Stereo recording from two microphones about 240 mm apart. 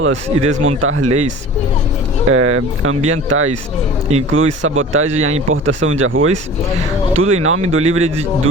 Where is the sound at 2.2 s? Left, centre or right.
Right.